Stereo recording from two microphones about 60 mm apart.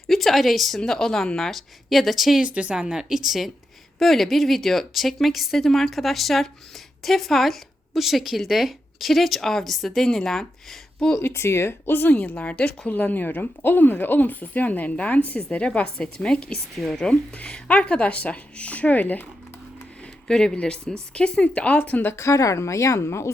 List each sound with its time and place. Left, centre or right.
0.1 s a woman's voice: centre
2.4 s a woman's voice: centre
11.2 s a woman's voice: left
20.2 s a woman's voice: centre; by 22.1 s left
22.1 s speech: left